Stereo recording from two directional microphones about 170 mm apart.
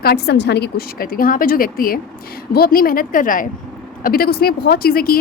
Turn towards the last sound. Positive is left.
turn(degrees=60)  # may be behind; listen again after turning